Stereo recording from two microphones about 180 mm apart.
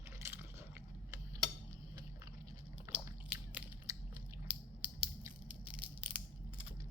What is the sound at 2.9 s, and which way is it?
Biting, 10° right (ahead or behind).